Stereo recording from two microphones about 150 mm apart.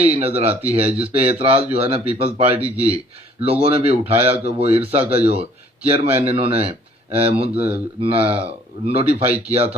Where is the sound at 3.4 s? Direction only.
40° right (ahead or behind).